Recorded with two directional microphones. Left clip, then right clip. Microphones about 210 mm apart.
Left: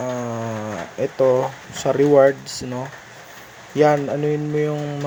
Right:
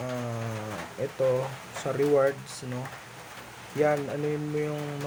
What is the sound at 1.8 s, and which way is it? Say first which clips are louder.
Speech: left 10 dB; 25° left (ahead or behind).